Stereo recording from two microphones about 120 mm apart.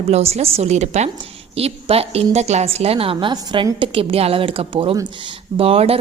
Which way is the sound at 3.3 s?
40° right (ahead or behind).